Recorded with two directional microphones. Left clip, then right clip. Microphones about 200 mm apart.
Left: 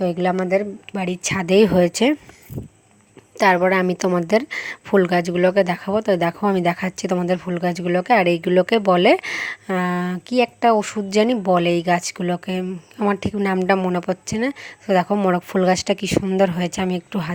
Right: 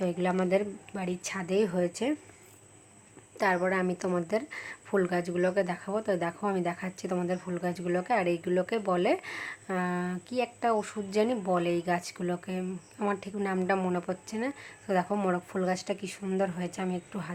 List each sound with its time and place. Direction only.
0.0 s a woman's voice: 30° left (ahead or behind)
0.3 s a woman's voice: 20° left (ahead or behind)
0.9 s speech: 35° left (ahead or behind)
3.3 s a woman's voice: 40° left (ahead or behind)